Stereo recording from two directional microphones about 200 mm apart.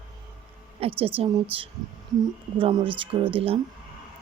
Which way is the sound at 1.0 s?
30° right (ahead or behind).